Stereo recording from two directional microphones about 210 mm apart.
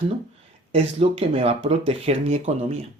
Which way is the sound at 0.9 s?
30° right (ahead or behind).